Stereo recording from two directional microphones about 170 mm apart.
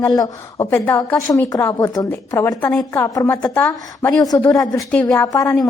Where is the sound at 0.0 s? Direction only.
20° left (ahead or behind).